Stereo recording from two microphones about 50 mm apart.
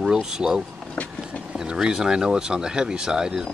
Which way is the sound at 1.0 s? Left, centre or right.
Left.